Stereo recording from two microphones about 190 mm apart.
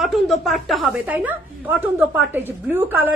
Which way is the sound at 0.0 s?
Centre (ahead or behind).